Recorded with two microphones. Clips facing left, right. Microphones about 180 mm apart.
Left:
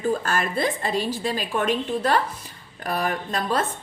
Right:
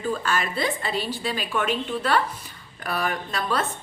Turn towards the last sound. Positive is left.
turn(degrees=40)  # may be behind; listen again after turning